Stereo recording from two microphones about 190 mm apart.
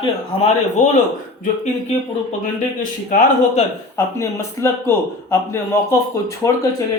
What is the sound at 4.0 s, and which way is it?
Speech, 15° left (ahead or behind).